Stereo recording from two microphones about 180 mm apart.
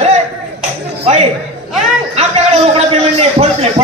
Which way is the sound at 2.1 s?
35° right (ahead or behind).